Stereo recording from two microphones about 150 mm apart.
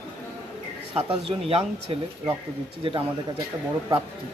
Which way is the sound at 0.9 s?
40° right (ahead or behind).